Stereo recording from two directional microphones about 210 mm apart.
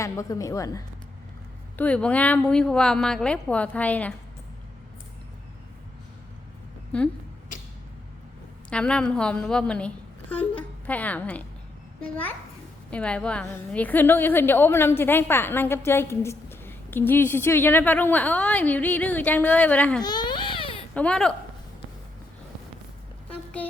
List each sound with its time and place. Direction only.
0.0 s a woman's voice: 15° left (ahead or behind)
6.9 s a woman's voice: 5° left (ahead or behind)
8.7 s a woman's voice: 5° left (ahead or behind)
12.9 s a woman's voice: 5° left (ahead or behind)
20.0 s baby cry: 20° left (ahead or behind)
20.9 s a woman's voice: 5° left (ahead or behind)
23.3 s a sound: 5° left (ahead or behind)